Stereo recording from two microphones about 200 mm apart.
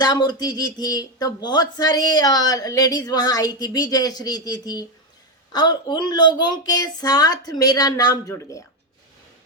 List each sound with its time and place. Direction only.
0.0 s speech: 20° left (ahead or behind)